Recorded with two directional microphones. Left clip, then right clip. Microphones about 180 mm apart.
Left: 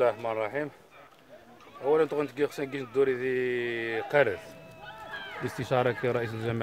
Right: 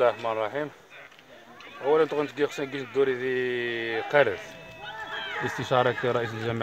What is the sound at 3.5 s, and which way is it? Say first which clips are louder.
Speech: right 2 dB; 90° left.